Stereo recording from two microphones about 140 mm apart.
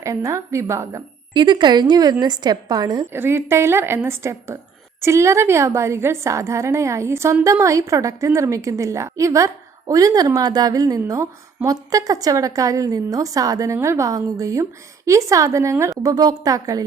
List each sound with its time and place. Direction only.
0.0 s a woman's voice: 25° right (ahead or behind)
1.3 s a woman's voice: 35° right (ahead or behind)
3.1 s a woman's voice: 15° right (ahead or behind)